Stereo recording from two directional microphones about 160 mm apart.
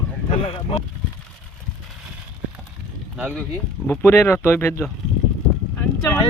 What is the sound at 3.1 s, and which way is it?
Speech, 10° right (ahead or behind).